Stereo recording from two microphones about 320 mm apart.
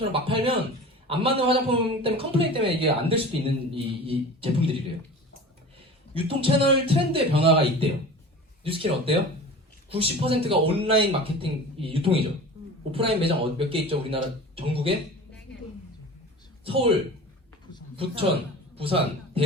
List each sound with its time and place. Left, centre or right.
0.0 s a man's voice: centre
6.1 s a man's voice: centre
16.6 s a man's voice: centre
17.9 s a man's voice: centre